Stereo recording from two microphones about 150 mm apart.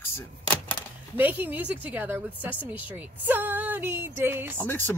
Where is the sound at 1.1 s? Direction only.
10° right (ahead or behind).